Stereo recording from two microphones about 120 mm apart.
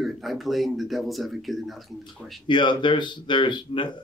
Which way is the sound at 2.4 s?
40° left (ahead or behind).